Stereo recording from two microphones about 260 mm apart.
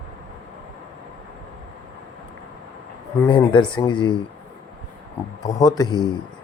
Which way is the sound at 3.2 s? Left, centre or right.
Centre.